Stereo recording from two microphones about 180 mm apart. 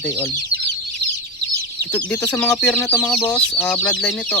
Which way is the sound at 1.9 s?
10° left (ahead or behind).